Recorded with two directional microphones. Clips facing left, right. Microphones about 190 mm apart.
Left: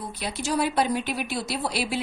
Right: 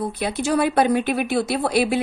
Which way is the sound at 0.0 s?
55° right (ahead or behind).